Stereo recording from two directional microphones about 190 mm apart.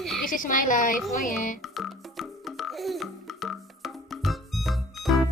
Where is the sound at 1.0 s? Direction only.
Centre (ahead or behind).